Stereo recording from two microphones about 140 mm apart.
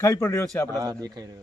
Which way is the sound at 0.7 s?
25° right (ahead or behind).